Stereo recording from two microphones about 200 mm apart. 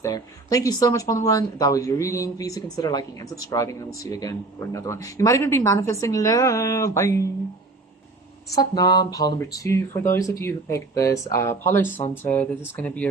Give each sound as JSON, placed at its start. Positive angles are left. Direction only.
{"t": 0.0, "sound": "speech", "side_deg": 15}
{"t": 8.5, "sound": "speech", "side_deg": 20}